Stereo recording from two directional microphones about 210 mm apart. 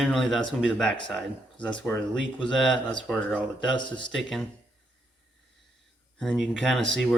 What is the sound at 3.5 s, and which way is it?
Speech, 25° left (ahead or behind).